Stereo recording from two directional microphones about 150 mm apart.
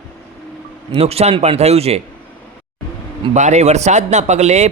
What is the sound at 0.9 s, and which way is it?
A man's voice, 45° right (ahead or behind).